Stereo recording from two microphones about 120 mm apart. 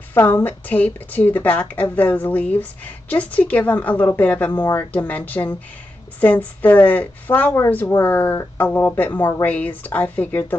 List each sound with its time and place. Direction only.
0.1 s a woman's voice: 20° left (ahead or behind)